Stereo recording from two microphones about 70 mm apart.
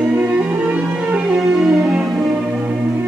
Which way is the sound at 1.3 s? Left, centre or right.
Centre.